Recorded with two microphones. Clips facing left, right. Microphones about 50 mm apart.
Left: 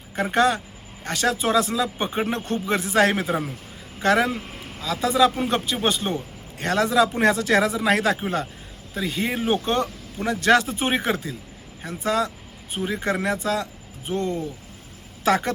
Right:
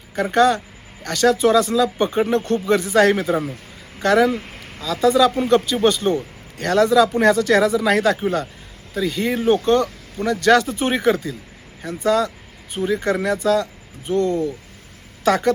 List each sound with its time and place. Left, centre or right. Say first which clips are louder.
0.2 s speech: right 4 dB; left
4.3 s vehicle: right 5 dB; right
4.8 s speech: right 4 dB; left